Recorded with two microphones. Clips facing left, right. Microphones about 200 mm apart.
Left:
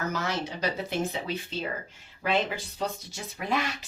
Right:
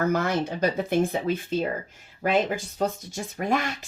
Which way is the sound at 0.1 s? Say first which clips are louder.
Right 7 dB; 55° right (ahead or behind).